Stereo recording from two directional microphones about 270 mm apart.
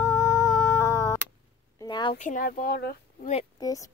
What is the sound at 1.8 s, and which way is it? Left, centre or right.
Speech, centre.